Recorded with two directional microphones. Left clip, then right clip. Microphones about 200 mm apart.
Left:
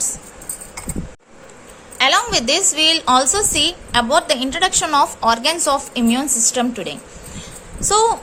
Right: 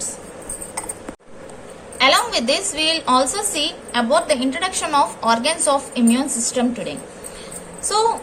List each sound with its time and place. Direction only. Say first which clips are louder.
2.0 s a woman's voice: left 1 dB; 40° left (ahead or behind)